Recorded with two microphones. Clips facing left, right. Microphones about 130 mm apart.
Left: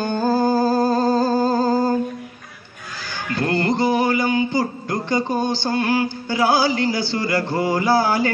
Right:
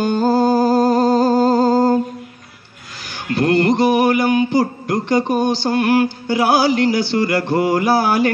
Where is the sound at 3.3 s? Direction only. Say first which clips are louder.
Right 6 dB; 70° right (ahead or behind).